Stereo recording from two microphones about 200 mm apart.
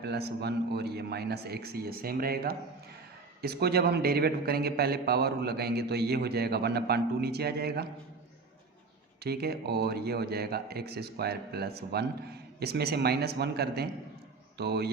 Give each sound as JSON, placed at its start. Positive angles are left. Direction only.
{"t": 0.0, "sound": "a man's voice", "side_deg": -55}
{"t": 9.2, "sound": "a man's voice", "side_deg": -50}